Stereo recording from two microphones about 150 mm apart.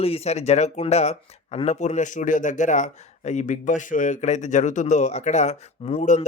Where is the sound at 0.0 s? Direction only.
40° left (ahead or behind).